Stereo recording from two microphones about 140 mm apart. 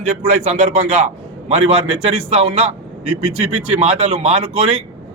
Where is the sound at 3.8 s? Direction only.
50° right (ahead or behind).